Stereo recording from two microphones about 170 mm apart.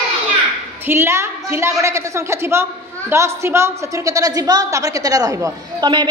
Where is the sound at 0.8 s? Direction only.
15° right (ahead or behind).